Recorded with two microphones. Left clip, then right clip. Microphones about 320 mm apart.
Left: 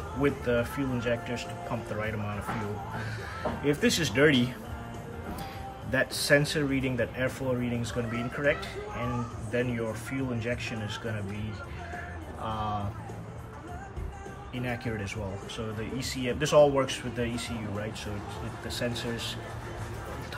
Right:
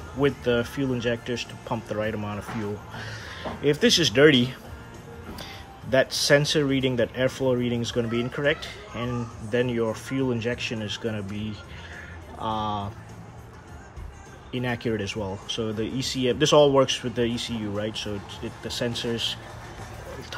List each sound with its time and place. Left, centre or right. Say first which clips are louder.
0.2 s speech: right 4 dB; centre
3.6 s speech: right 7 dB; centre
5.9 s speech: right 5 dB; centre
12.4 s speech: right 6 dB; centre
14.5 s speech: right 7 dB; centre